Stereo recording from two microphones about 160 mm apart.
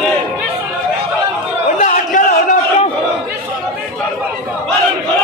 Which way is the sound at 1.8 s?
55° left (ahead or behind).